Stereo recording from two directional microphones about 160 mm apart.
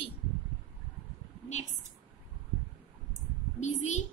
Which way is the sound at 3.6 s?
45° left (ahead or behind).